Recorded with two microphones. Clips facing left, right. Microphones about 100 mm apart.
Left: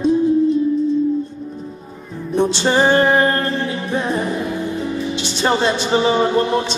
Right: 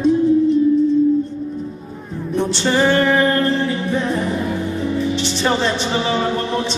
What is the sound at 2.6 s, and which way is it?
Speech, 30° left (ahead or behind).